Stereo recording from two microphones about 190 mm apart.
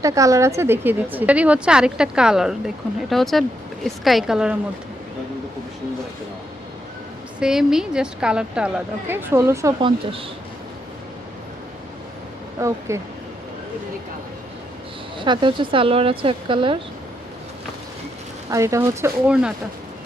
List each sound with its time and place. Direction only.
0.0 s a woman's voice: 15° right (ahead or behind)
7.3 s a woman's voice: 5° right (ahead or behind)
9.8 s speech: 30° right (ahead or behind)
12.5 s speech: 15° right (ahead or behind)
15.2 s speech: 25° right (ahead or behind)
18.5 s speech: 15° right (ahead or behind)